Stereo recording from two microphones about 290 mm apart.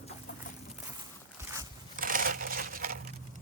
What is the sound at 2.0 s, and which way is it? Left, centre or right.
Crumpling, right.